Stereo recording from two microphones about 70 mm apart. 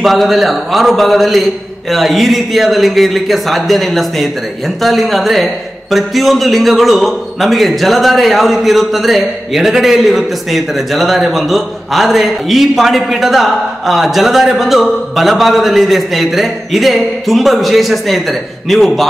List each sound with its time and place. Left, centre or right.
0.0 s a man's voice: centre